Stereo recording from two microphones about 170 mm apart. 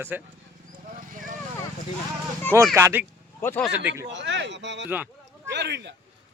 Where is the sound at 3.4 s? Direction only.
15° left (ahead or behind).